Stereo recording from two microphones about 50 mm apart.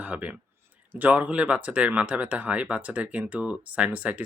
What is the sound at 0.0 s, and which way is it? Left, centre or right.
Speech, right.